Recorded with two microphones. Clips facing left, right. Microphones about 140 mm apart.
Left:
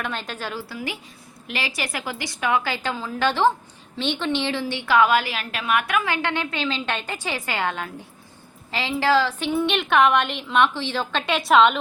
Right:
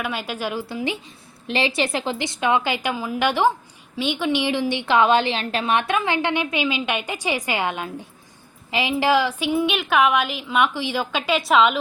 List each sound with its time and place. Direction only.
0.0 s a woman's voice: 10° right (ahead or behind)
11.3 s a woman's voice: centre (ahead or behind)